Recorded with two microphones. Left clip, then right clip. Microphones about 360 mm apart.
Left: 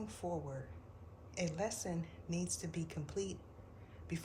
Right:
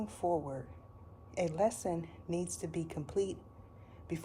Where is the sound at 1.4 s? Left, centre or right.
Centre.